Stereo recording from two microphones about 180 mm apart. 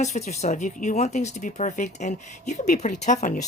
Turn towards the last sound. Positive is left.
turn(degrees=45)  # may be behind; listen again after turning